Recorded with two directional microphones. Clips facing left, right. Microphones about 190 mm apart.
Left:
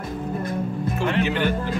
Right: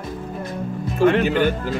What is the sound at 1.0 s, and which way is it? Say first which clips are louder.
Speech: right 8 dB; 50° right (ahead or behind).